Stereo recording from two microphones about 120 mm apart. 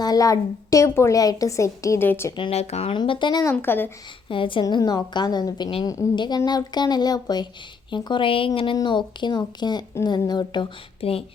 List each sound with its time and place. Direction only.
0.0 s a woman's voice: 30° left (ahead or behind)
2.5 s speech: 60° left (ahead or behind)
2.9 s speech: 40° left (ahead or behind)
3.5 s speech: 15° left (ahead or behind)
4.3 s a woman's voice: 45° left (ahead or behind)
4.6 s a woman's voice: 35° left (ahead or behind)
11.0 s a woman's voice: 55° left (ahead or behind)